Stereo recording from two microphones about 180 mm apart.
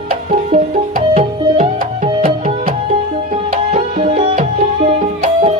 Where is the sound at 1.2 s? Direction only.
35° right (ahead or behind).